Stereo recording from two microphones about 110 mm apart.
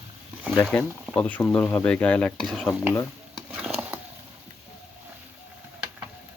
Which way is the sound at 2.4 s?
Centre (ahead or behind).